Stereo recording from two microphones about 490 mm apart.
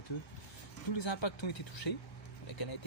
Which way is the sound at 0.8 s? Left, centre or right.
Left.